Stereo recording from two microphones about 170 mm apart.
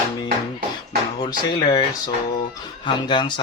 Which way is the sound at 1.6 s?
35° left (ahead or behind).